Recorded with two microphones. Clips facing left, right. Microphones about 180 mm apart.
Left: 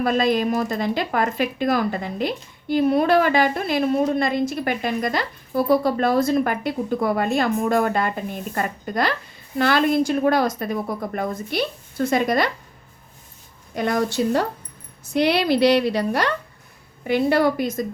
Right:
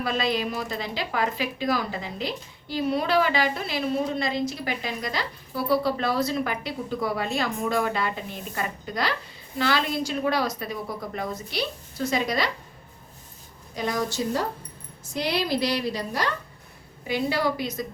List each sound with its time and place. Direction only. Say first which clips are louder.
0.0 s speech: left 7 dB; 50° left (ahead or behind)
13.7 s a woman's voice: left 6 dB; 60° left (ahead or behind)
17.0 s a woman's voice: left 7 dB; 55° left (ahead or behind)